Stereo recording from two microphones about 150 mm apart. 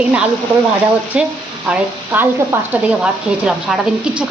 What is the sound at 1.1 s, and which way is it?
A woman's voice, 5° right (ahead or behind).